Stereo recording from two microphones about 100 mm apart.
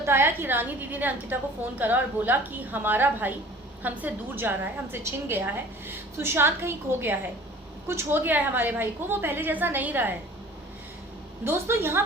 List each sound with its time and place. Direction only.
0.0 s a woman's voice: 25° right (ahead or behind)
11.4 s a woman's voice: 25° right (ahead or behind)